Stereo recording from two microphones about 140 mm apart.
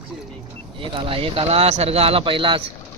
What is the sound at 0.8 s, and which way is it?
Speech, 40° right (ahead or behind).